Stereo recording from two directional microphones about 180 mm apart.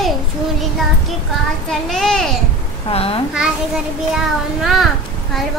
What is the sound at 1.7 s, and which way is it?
Speech, 5° left (ahead or behind).